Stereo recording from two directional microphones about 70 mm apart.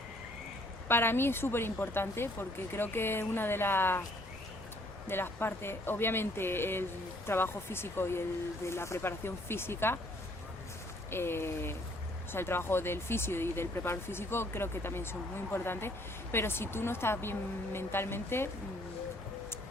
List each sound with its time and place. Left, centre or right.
0.9 s speech: left
5.0 s speech: left
11.1 s speech: left